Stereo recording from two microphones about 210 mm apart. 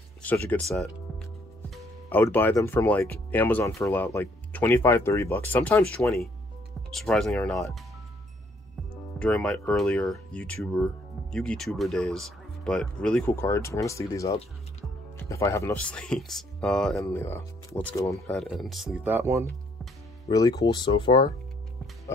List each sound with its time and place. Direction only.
0.2 s speech: 5° left (ahead or behind)
2.0 s speech: 10° left (ahead or behind)
9.2 s speech: 5° left (ahead or behind)
18.4 s speech: centre (ahead or behind)
20.2 s speech: 15° left (ahead or behind)